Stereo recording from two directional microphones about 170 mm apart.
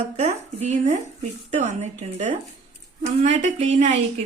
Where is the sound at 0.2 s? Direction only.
40° right (ahead or behind).